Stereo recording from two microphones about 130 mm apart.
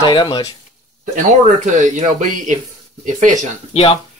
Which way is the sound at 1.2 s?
70° right (ahead or behind).